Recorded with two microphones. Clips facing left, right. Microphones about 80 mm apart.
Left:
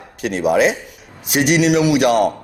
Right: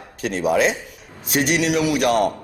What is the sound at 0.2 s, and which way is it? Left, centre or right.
A man's voice, centre.